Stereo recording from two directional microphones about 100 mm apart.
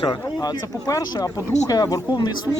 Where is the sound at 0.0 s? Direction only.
40° left (ahead or behind).